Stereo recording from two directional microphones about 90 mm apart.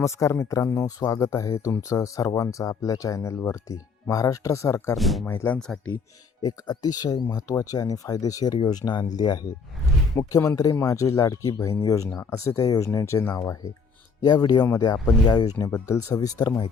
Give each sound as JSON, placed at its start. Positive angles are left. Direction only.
{"t": 0.0, "sound": "speech", "side_deg": 35}
{"t": 4.9, "sound": "speech", "side_deg": 0}
{"t": 5.2, "sound": "speech", "side_deg": 25}
{"t": 5.5, "sound": "speech", "side_deg": 5}
{"t": 6.4, "sound": "speech", "side_deg": 45}
{"t": 8.7, "sound": "speech", "side_deg": 50}
{"t": 10.2, "sound": "speech", "side_deg": 35}
{"t": 14.3, "sound": "speech", "side_deg": 50}
{"t": 15.7, "sound": "speech", "side_deg": 35}